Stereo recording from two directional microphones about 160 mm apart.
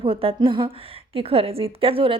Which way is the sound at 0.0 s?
35° right (ahead or behind).